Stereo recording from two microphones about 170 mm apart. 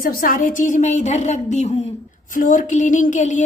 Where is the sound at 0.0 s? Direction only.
55° left (ahead or behind); by 1.9 s 40° left (ahead or behind).